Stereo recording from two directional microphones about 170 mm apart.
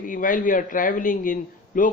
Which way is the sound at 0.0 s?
50° left (ahead or behind).